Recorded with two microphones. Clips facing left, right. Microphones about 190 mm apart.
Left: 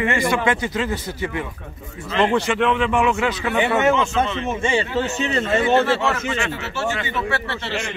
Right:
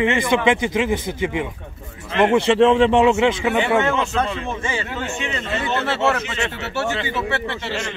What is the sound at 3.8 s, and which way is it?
A man's voice, 20° left (ahead or behind).